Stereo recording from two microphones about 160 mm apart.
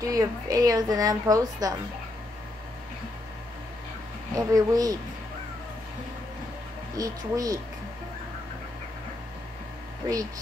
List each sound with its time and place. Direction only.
0.0 s a woman's voice: 20° right (ahead or behind)
4.4 s a woman's voice: 20° right (ahead or behind)
7.0 s a woman's voice: 20° right (ahead or behind)